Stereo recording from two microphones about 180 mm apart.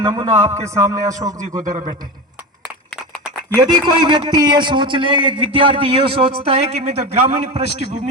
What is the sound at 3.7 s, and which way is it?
A man's voice, 25° right (ahead or behind).